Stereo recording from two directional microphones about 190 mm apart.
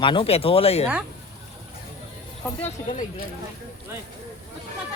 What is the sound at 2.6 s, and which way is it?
Speech, 40° left (ahead or behind).